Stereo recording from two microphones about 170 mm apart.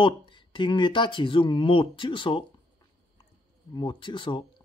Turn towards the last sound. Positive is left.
turn(degrees=30)  # may be behind; listen again after turning